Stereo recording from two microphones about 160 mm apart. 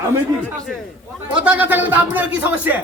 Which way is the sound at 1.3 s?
10° right (ahead or behind).